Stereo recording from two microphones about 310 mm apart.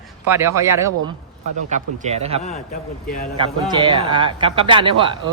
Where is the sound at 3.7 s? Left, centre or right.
Centre.